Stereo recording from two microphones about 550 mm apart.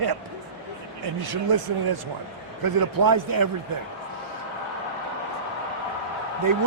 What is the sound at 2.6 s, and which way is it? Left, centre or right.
Speech, right.